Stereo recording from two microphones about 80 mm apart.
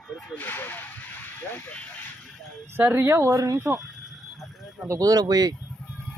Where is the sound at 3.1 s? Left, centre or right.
Right.